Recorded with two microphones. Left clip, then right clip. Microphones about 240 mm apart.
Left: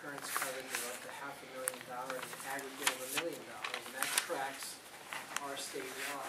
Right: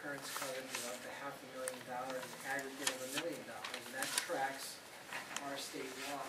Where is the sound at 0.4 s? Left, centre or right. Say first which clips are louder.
Left 6 dB; centre.